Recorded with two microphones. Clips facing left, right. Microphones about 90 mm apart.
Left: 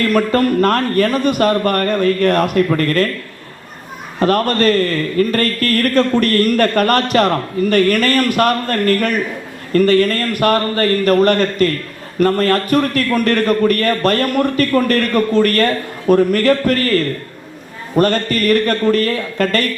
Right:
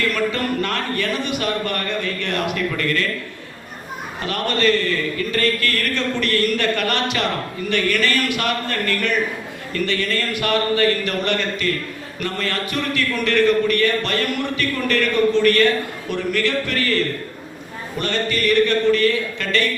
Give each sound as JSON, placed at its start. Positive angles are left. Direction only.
{"t": 0.0, "sound": "a man's voice", "side_deg": 45}
{"t": 4.2, "sound": "a man's voice", "side_deg": 45}